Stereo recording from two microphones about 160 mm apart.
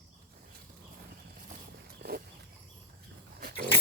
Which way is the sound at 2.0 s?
75° right (ahead or behind).